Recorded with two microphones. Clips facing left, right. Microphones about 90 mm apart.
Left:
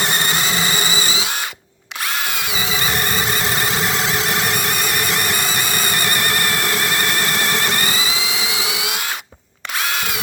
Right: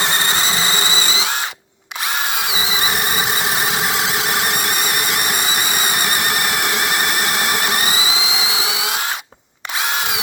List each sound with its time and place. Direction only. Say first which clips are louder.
0.0 s music: right 1 dB; 25° right (ahead or behind)
2.5 s squeal: right 1 dB; 10° right (ahead or behind); by 9.0 s 25° right (ahead or behind)